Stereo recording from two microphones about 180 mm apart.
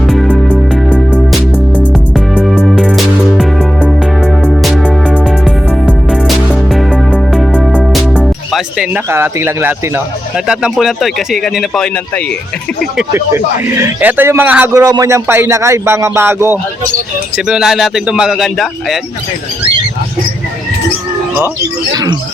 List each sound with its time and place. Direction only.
0.1 s music: 5° left (ahead or behind)
9.0 s speech: 15° right (ahead or behind)
13.1 s speech: 15° right (ahead or behind)
14.8 s speech: 20° right (ahead or behind); by 18.9 s centre (ahead or behind)
21.9 s speech: 20° right (ahead or behind)